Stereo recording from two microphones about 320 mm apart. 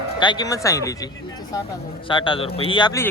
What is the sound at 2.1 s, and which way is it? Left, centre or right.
Speech, centre.